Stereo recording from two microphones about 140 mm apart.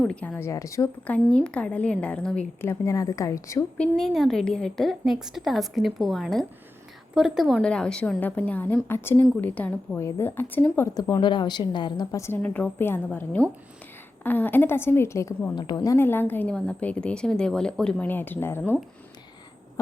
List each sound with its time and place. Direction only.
0.0 s a woman's voice: 10° left (ahead or behind)
1.0 s a woman's voice: 10° left (ahead or behind)
3.8 s a woman's voice: 5° left (ahead or behind)
10.9 s a woman's voice: 30° left (ahead or behind)
12.2 s a woman's voice: 15° left (ahead or behind)